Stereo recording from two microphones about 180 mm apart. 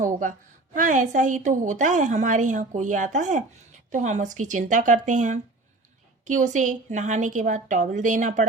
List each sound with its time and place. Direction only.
0.0 s a woman's voice: 45° right (ahead or behind)